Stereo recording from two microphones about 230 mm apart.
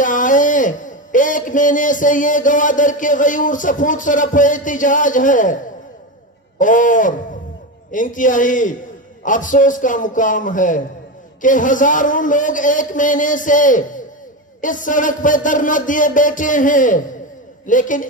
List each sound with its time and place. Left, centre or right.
0.0 s a man's voice: left
6.6 s a man's voice: left